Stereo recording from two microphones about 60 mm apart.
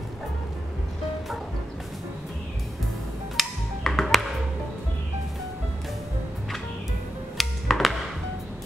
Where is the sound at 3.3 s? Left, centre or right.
Centre.